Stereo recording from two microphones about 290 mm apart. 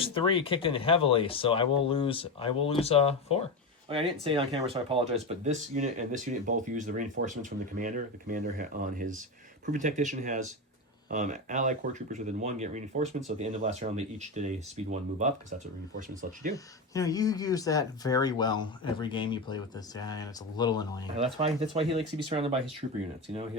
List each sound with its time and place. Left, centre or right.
0.0 s speech: centre
4.2 s speech: centre
16.9 s speech: centre
21.3 s speech: centre